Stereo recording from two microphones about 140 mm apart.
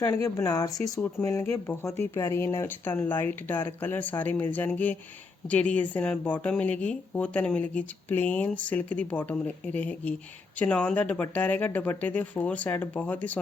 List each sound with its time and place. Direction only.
0.0 s speech: 20° left (ahead or behind)